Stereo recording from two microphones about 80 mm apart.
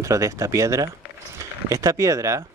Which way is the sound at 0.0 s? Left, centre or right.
Right.